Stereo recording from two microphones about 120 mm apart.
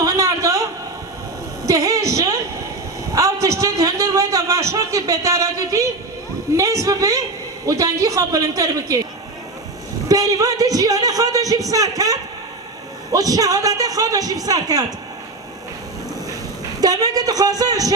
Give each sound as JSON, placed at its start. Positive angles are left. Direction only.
{"t": 0.0, "sound": "a sound", "side_deg": -30}
{"t": 3.2, "sound": "a man's voice", "side_deg": -25}
{"t": 10.1, "sound": "a man's voice", "side_deg": -30}
{"t": 16.8, "sound": "a man's voice", "side_deg": -30}